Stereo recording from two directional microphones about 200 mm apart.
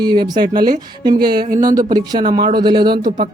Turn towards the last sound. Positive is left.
turn(degrees=-40)  # may be behind; listen again after turning